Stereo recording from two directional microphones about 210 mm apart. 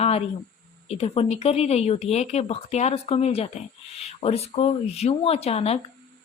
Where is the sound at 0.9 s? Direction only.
30° left (ahead or behind).